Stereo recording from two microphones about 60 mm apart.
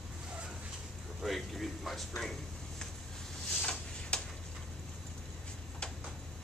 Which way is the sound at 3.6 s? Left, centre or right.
Centre.